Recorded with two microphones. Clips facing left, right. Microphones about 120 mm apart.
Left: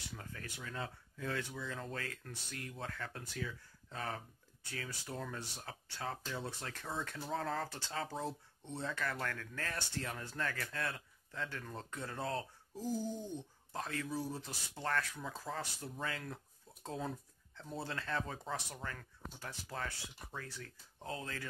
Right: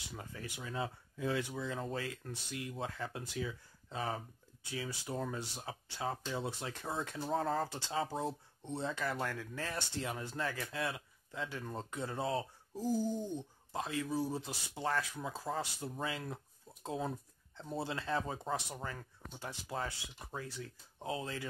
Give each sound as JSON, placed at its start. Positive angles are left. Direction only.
{"t": 0.2, "sound": "speech", "side_deg": -15}
{"t": 7.3, "sound": "speech", "side_deg": -5}
{"t": 12.2, "sound": "speech", "side_deg": -5}
{"t": 13.7, "sound": "speech", "side_deg": -10}